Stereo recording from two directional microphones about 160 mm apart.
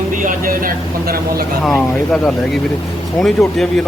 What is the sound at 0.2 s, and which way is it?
Speech, 60° right (ahead or behind).